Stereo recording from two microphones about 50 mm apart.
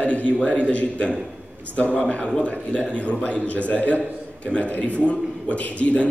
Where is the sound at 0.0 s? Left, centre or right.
Left.